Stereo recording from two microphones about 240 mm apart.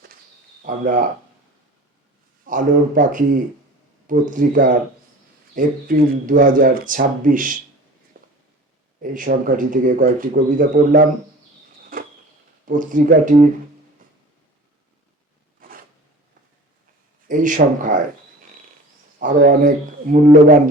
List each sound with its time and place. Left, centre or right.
0.6 s speech: right
2.5 s speech: right
8.1 s walk: right
9.0 s speech: right
12.6 s speech: right
17.2 s speech: right
19.2 s speech: right